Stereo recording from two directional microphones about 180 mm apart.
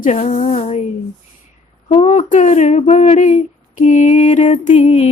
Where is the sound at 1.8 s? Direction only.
40° left (ahead or behind).